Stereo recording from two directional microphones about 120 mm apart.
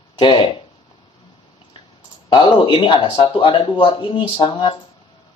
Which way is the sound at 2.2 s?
40° left (ahead or behind).